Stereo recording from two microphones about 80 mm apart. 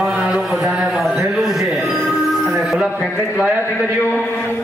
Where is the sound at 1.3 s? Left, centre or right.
Centre.